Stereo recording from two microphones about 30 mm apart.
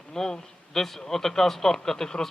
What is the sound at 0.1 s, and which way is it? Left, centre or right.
Speech, centre.